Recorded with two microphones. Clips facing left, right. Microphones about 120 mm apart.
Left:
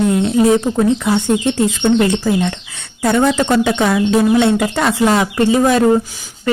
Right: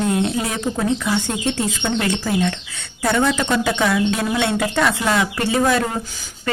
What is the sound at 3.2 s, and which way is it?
A woman's voice, 40° left (ahead or behind).